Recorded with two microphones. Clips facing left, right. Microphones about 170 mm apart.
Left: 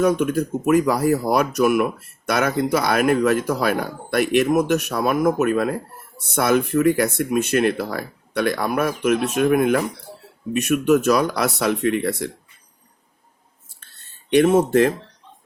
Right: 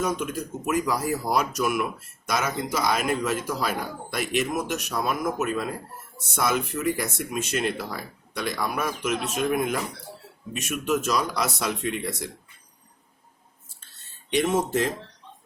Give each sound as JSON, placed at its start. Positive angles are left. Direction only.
{"t": 0.0, "sound": "speech", "side_deg": 60}
{"t": 14.3, "sound": "speech", "side_deg": 60}